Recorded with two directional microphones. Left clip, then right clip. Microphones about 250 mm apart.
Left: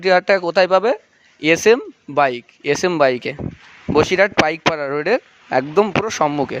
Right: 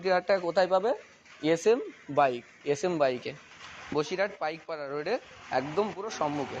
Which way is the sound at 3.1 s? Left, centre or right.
Left.